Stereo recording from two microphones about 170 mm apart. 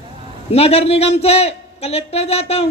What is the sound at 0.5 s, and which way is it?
A woman's voice, 35° left (ahead or behind).